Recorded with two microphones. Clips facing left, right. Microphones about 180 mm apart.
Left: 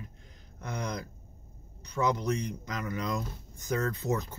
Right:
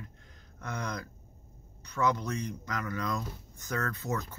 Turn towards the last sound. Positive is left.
turn(degrees=15)  # may be behind; listen again after turning